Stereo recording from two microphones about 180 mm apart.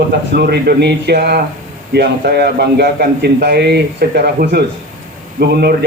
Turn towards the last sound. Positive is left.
turn(degrees=-65)  # may be behind; listen again after turning